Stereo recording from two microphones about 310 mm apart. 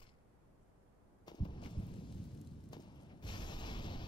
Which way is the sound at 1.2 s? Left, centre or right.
Centre.